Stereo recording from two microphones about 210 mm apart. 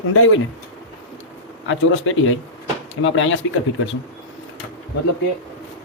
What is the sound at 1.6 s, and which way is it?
Speech, 70° left (ahead or behind).